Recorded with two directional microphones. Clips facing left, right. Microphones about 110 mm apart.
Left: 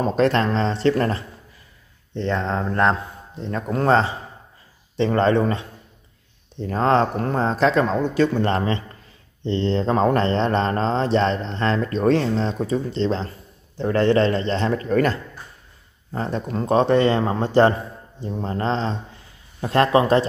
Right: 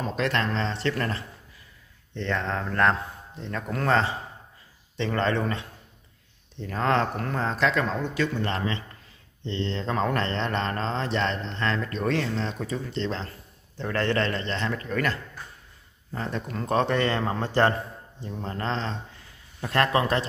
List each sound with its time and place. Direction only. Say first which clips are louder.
0.0 s mantra: left 8 dB; 40° left (ahead or behind)
2.1 s speech: left 5 dB; 25° left (ahead or behind)
6.6 s mantra: left 6 dB; 30° left (ahead or behind)
13.7 s speech: left 8 dB; 20° left (ahead or behind)